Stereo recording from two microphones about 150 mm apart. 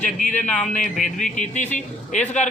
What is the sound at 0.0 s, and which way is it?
Speech, 55° left (ahead or behind).